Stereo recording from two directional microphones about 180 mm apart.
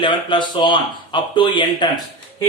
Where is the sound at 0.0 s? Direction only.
25° left (ahead or behind).